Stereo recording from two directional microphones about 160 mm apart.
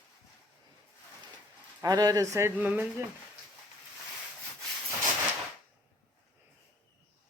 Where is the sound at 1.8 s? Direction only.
25° right (ahead or behind).